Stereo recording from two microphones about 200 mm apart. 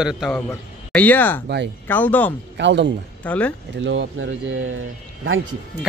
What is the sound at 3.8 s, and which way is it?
Speech, 75° right (ahead or behind).